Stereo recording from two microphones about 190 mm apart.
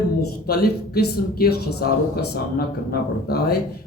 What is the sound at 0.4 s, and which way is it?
Speech, 55° left (ahead or behind).